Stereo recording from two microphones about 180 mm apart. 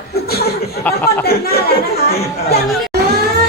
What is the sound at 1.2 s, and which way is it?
A man's voice, 55° left (ahead or behind).